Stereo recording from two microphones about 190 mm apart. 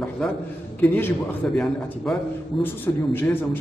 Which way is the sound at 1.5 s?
5° left (ahead or behind).